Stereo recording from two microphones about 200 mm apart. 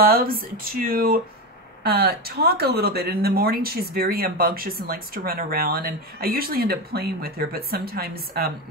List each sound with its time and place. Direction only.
0.0 s speech: 45° right (ahead or behind)